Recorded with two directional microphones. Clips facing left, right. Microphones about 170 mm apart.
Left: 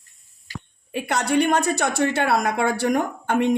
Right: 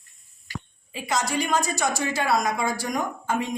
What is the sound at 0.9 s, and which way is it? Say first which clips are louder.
A woman's voice: left 4 dB; 60° left (ahead or behind).